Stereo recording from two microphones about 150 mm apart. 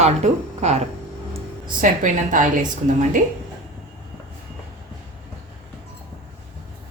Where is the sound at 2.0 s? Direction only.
60° right (ahead or behind).